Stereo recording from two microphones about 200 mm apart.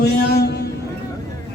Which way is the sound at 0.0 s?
55° left (ahead or behind).